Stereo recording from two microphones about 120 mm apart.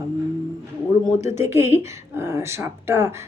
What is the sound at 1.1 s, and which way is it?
Speech, 20° right (ahead or behind).